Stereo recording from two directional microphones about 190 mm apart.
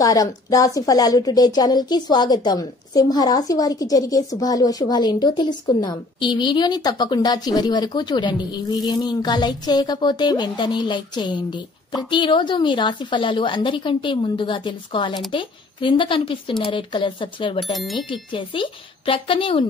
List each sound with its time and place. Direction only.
0.0 s speech: 20° left (ahead or behind)
17.7 s speech: centre (ahead or behind)
18.3 s speech: 25° left (ahead or behind)